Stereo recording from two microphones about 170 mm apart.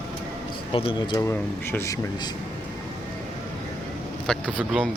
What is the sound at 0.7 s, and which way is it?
Speech, 30° left (ahead or behind).